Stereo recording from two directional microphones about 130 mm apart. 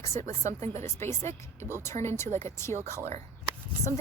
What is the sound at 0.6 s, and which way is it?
Speech, 60° right (ahead or behind).